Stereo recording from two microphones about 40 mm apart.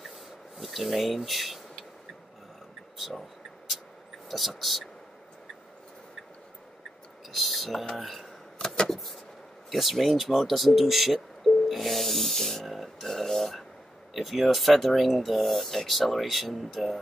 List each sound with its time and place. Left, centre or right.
0.6 s speech: centre
3.0 s speech: centre
4.3 s speech: centre
7.2 s speech: centre
8.5 s vehicle: centre
8.9 s speech: centre
11.4 s a sound: centre
14.1 s speech: centre